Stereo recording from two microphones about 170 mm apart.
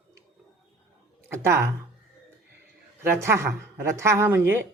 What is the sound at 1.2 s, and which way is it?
Speech, 15° right (ahead or behind).